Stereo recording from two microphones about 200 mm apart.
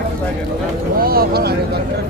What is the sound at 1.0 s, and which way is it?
Vehicle, 50° right (ahead or behind).